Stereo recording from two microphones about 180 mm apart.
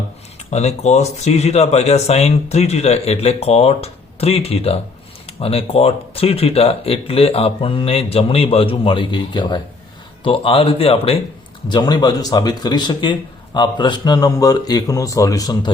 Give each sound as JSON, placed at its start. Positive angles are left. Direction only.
{"t": 0.5, "sound": "speech", "side_deg": 35}
{"t": 11.7, "sound": "speech", "side_deg": 20}